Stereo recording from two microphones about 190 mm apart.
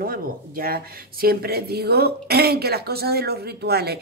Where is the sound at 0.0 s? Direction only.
50° right (ahead or behind).